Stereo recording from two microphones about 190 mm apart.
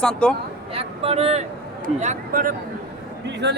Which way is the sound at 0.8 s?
30° right (ahead or behind).